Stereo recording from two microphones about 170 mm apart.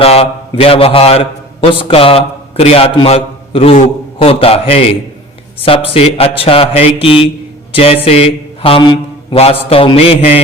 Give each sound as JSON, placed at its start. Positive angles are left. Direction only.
{"t": 0.0, "sound": "a man's voice", "side_deg": 35}
{"t": 7.7, "sound": "a sound", "side_deg": 35}
{"t": 8.0, "sound": "a man's voice", "side_deg": 35}